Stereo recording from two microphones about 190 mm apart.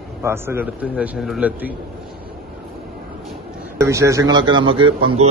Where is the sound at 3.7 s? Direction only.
15° right (ahead or behind).